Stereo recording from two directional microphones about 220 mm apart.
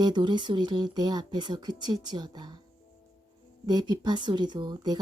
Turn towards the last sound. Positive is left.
turn(degrees=-20)  # may be behind; listen again after turning